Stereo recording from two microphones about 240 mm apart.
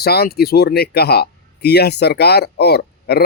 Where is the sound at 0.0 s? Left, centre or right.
Left.